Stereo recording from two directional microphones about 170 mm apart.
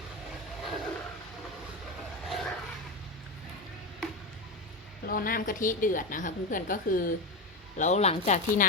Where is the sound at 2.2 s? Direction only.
Centre (ahead or behind).